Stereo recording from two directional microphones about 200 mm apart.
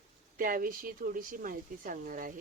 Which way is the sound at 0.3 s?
45° right (ahead or behind).